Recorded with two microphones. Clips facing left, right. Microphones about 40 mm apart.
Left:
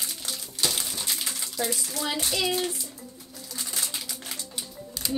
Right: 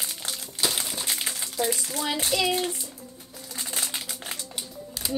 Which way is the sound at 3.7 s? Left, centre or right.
Right.